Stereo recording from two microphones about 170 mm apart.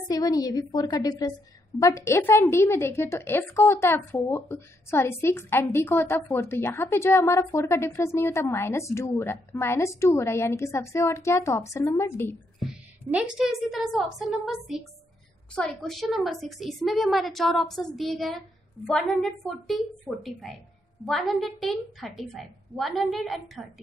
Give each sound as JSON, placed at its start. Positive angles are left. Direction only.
{"t": 0.1, "sound": "a woman's voice", "side_deg": 20}
{"t": 12.5, "sound": "a woman's voice", "side_deg": -5}